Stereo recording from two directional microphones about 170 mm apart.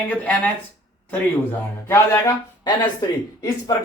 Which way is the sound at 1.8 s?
15° left (ahead or behind).